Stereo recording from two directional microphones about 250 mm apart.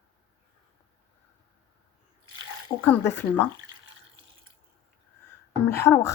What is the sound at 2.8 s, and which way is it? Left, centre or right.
Speech, centre.